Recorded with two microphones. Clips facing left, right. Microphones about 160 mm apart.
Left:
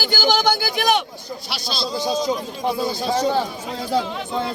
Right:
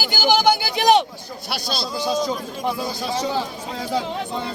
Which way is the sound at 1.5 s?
55° right (ahead or behind).